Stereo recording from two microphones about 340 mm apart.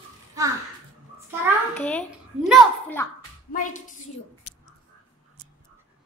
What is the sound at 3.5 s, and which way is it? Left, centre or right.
Speech, left.